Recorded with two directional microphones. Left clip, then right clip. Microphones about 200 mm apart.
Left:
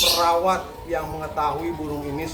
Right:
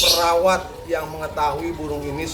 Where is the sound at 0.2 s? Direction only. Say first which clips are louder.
Right 2 dB; 20° right (ahead or behind).